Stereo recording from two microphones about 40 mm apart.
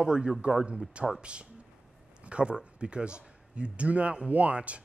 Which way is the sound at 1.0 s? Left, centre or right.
Right.